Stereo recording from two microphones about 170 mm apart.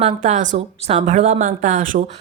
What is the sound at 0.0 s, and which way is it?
Speech, 45° right (ahead or behind).